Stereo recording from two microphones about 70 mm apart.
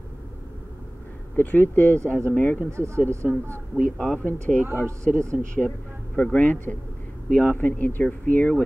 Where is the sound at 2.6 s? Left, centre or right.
Right.